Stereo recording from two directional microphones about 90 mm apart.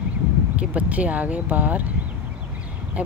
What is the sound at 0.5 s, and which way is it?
Speech, 15° right (ahead or behind).